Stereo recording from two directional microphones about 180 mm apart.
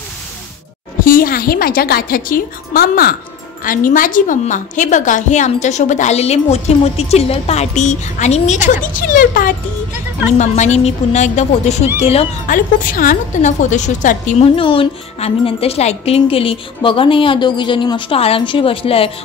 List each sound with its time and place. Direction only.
1.0 s a woman's voice: 50° left (ahead or behind)
14.5 s a woman's voice: 30° left (ahead or behind)